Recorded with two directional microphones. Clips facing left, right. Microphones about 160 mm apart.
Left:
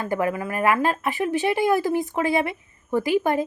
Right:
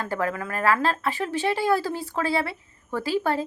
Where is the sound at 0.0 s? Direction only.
15° left (ahead or behind).